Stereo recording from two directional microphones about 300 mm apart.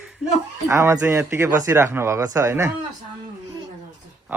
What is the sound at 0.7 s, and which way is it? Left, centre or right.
A man's voice, centre.